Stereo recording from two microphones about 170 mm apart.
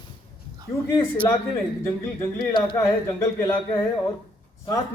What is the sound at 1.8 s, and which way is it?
A man's voice, 20° left (ahead or behind).